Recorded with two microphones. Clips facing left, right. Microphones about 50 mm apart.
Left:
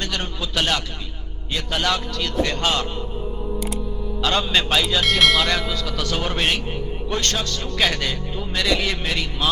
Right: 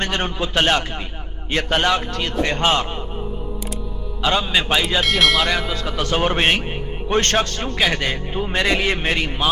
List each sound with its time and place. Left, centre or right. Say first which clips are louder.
0.0 s a man's voice: right 5 dB; right
2.4 s a man's voice: right 3 dB; right
4.4 s a man's voice: even; centre
5.0 s speech: left 1 dB; centre
5.5 s speech: right 1 dB; centre
5.7 s a man's voice: right 4 dB; right